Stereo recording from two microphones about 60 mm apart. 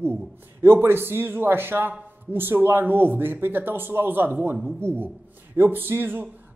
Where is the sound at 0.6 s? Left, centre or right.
Right.